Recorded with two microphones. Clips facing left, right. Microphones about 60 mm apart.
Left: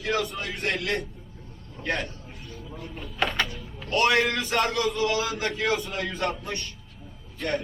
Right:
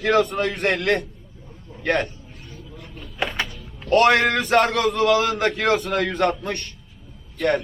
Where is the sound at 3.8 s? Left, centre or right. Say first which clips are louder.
Right 6 dB; right.